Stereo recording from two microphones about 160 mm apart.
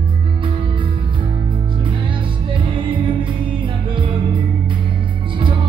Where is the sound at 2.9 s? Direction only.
35° right (ahead or behind).